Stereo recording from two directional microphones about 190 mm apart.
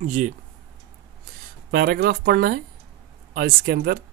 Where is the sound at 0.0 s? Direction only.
40° right (ahead or behind).